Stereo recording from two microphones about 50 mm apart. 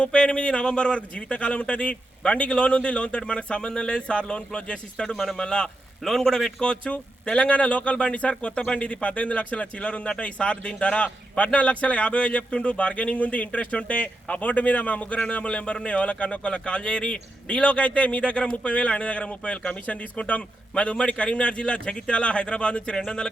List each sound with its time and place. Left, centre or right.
0.0 s a man's voice: left
5.1 s speech: centre
5.4 s speech: centre
6.0 s a man's voice: centre